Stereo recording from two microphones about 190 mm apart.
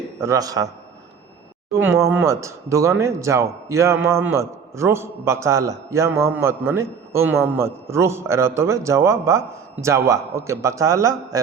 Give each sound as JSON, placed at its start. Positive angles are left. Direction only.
{"t": 0.2, "sound": "speech", "side_deg": -15}
{"t": 1.7, "sound": "speech", "side_deg": -15}